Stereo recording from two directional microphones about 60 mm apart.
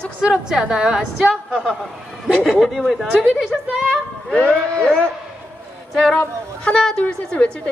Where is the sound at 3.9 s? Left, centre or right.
Centre.